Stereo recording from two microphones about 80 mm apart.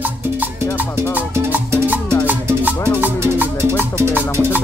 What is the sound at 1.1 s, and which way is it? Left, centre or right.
Music, right.